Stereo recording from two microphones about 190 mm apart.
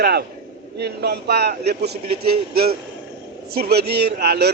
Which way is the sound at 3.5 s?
55° right (ahead or behind).